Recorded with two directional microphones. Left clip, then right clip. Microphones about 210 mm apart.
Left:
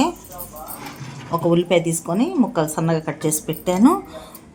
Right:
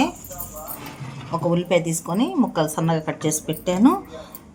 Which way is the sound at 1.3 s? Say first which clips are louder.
Left 3 dB; 25° left (ahead or behind).